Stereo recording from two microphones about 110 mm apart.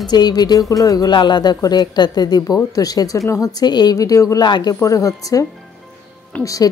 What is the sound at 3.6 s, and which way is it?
Speech, 40° left (ahead or behind).